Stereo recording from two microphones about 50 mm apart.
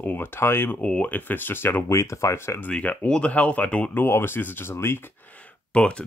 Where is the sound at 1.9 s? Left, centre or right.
Left.